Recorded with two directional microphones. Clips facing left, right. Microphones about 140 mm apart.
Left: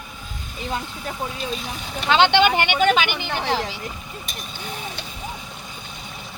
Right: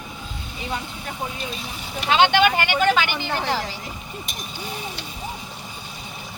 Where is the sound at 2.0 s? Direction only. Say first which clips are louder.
Left 1 dB; 30° left (ahead or behind).